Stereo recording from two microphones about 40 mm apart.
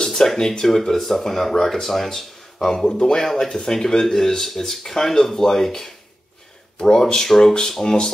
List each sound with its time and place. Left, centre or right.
0.0 s speech: centre